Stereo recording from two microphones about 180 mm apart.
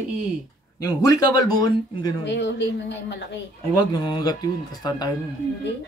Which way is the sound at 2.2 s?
75° left (ahead or behind).